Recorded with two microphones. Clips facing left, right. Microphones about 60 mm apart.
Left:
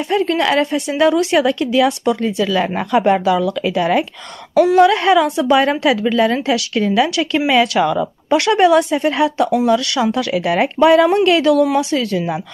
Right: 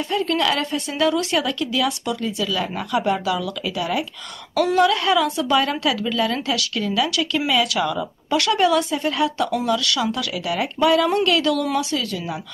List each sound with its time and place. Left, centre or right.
0.1 s a woman's voice: left
4.6 s a woman's voice: left
8.4 s a woman's voice: left